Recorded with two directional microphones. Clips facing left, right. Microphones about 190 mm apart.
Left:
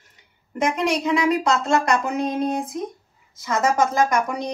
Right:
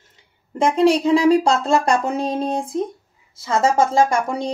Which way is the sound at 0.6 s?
30° right (ahead or behind).